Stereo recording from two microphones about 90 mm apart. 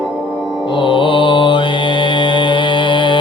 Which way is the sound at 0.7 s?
65° left (ahead or behind).